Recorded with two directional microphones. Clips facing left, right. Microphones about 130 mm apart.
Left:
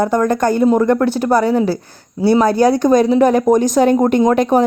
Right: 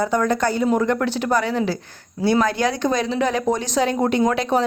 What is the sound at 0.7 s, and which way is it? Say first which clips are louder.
Speech: left 6 dB; 40° left (ahead or behind).